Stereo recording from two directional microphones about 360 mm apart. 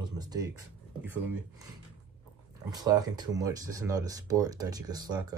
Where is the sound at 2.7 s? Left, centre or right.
Centre.